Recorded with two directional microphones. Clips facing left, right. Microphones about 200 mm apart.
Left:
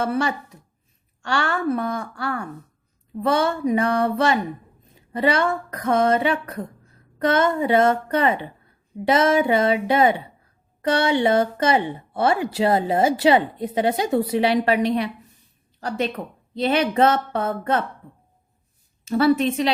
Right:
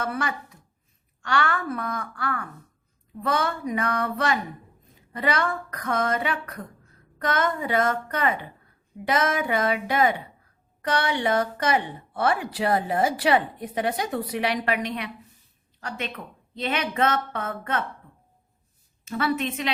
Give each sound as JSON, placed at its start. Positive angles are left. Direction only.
{"t": 0.0, "sound": "speech", "side_deg": 30}
{"t": 19.0, "sound": "speech", "side_deg": 35}